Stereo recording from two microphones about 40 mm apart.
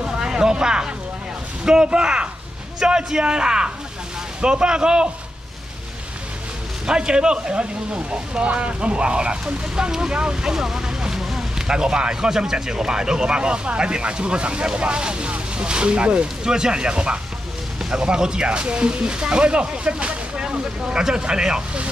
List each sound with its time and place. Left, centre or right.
0.0 s a sound: centre
1.6 s speech: right
6.9 s speech: right
9.8 s speech: centre